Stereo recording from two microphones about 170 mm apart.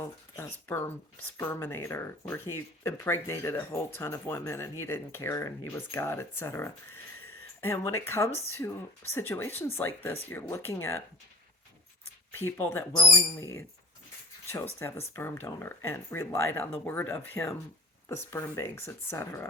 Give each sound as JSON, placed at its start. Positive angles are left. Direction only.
{"t": 0.0, "sound": "a sound", "side_deg": 10}
{"t": 1.4, "sound": "speech", "side_deg": 15}
{"t": 12.5, "sound": "speech", "side_deg": 10}